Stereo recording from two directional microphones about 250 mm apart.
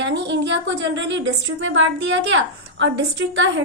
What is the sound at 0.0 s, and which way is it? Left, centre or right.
A woman's voice, right.